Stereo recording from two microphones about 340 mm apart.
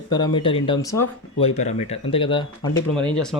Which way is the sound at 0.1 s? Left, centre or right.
Centre.